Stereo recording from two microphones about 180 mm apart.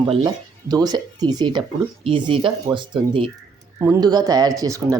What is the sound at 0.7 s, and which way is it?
Speech, 20° right (ahead or behind).